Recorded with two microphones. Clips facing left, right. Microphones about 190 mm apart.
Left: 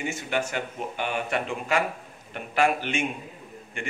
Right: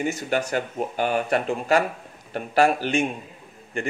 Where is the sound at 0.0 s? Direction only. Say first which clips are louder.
Right 4 dB; 40° right (ahead or behind).